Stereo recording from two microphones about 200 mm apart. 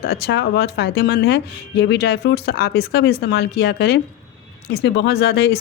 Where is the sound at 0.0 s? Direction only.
55° left (ahead or behind).